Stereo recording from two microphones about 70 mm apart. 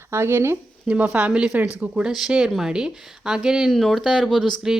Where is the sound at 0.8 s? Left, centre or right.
Right.